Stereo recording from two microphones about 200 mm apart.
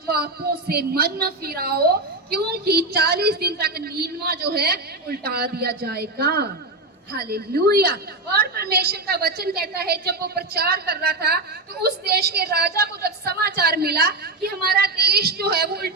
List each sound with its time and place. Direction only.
0.7 s a woman's voice: 50° right (ahead or behind)